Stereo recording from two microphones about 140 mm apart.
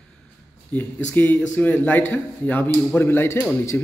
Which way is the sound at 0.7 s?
10° left (ahead or behind).